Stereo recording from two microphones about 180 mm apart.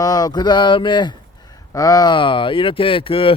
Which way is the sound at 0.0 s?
20° left (ahead or behind).